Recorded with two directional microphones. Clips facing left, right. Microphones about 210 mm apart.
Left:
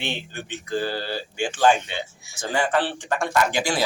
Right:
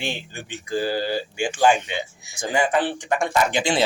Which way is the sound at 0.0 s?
10° right (ahead or behind).